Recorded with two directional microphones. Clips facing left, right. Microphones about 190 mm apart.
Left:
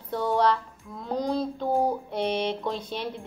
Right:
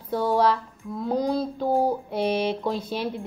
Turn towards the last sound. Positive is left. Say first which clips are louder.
# right 4 dB
turn(degrees=-5)  # may be behind; listen again after turning